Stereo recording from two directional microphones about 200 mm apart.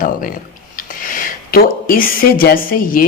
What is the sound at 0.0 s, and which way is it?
A man's voice, 45° left (ahead or behind).